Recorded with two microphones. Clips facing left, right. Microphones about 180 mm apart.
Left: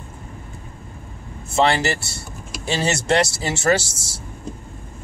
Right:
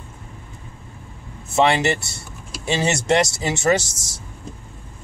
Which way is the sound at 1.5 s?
20° right (ahead or behind).